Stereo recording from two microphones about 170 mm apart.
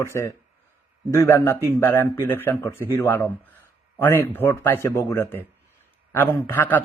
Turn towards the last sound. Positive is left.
turn(degrees=10)  # may be behind; listen again after turning